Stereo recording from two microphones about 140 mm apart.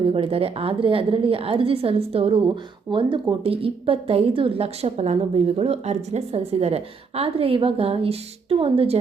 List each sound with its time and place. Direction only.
0.0 s a woman's voice: 40° right (ahead or behind)